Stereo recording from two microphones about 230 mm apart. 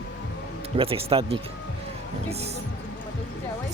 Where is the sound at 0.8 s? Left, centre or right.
Right.